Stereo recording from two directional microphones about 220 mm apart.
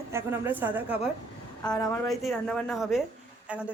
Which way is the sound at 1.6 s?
20° left (ahead or behind).